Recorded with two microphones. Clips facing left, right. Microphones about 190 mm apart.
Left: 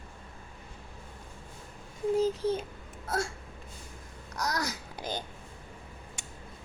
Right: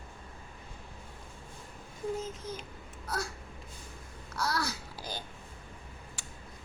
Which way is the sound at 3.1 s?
50° left (ahead or behind).